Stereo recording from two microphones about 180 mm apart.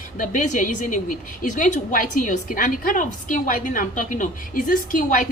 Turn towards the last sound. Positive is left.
turn(degrees=45)  # may be behind; listen again after turning